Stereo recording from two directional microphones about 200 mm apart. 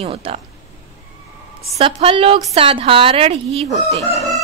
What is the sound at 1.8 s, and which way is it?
A woman's voice, 30° right (ahead or behind).